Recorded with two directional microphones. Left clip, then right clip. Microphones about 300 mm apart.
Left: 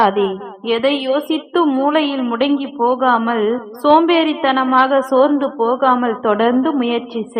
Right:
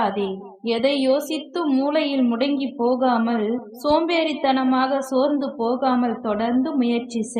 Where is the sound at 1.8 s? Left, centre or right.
Left.